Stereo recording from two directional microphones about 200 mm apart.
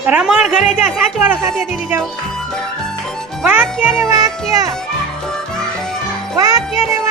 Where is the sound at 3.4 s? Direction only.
10° right (ahead or behind).